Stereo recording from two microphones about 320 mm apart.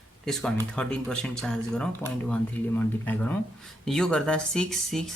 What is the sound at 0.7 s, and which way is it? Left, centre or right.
Speech, centre.